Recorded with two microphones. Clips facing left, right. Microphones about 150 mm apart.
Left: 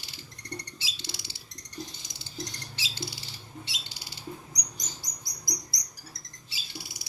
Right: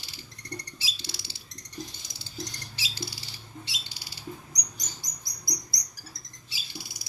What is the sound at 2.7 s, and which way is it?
Rodents, 20° left (ahead or behind).